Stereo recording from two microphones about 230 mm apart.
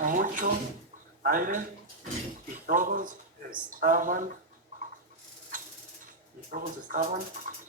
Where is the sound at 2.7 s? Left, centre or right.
Right.